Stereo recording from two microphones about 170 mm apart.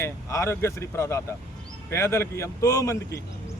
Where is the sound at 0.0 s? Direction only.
15° left (ahead or behind).